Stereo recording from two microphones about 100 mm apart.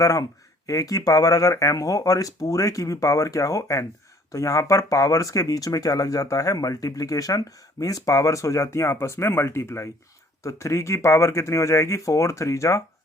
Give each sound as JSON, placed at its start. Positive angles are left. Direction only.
{"t": 0.0, "sound": "speech", "side_deg": 35}